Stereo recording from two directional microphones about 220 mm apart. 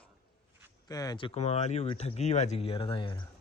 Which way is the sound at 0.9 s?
15° left (ahead or behind).